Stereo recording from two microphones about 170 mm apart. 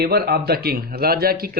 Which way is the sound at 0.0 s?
65° right (ahead or behind).